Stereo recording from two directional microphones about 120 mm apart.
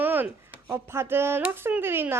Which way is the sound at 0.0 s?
15° right (ahead or behind).